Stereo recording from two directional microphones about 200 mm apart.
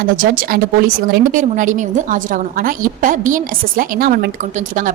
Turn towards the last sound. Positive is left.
turn(degrees=-40)  # may be behind; listen again after turning